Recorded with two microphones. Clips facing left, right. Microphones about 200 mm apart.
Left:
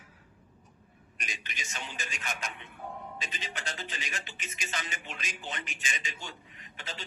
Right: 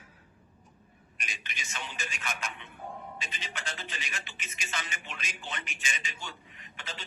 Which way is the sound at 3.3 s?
45° left (ahead or behind).